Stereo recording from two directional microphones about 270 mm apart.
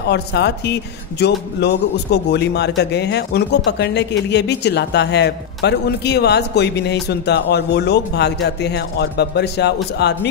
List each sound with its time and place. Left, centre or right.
0.1 s speech: left